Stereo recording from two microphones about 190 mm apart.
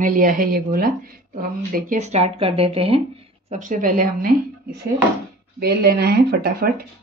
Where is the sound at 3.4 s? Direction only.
40° right (ahead or behind).